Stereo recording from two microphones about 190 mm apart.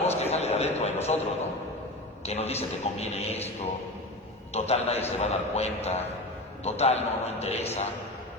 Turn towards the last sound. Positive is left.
turn(degrees=35)  # may be behind; listen again after turning